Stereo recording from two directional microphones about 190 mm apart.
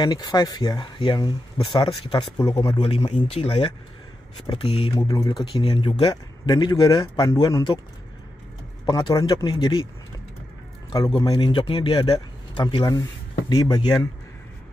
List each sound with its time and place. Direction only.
0.0 s speech: 20° left (ahead or behind)
8.8 s speech: 20° left (ahead or behind)
11.1 s speech: 25° left (ahead or behind)